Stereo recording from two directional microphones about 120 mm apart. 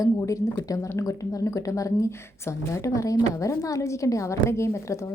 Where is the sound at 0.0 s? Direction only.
25° left (ahead or behind).